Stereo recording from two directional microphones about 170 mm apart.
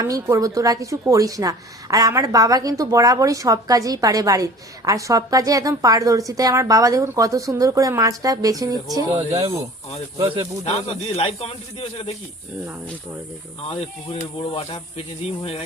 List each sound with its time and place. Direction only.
0.0 s speech: 20° right (ahead or behind)
10.8 s speech: 35° left (ahead or behind)
13.7 s speech: 35° left (ahead or behind)